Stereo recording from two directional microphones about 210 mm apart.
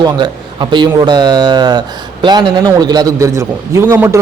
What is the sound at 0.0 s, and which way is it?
A man's voice, 20° right (ahead or behind).